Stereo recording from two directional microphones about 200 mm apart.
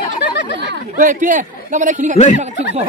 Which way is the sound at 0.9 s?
40° right (ahead or behind).